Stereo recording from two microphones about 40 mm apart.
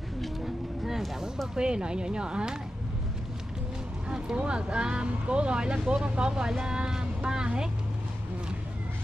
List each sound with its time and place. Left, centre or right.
1.5 s speech: right
4.4 s speech: right